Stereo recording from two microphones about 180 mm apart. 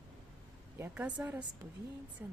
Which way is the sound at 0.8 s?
10° right (ahead or behind).